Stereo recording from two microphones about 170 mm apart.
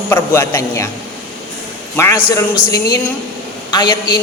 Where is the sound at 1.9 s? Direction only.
15° left (ahead or behind).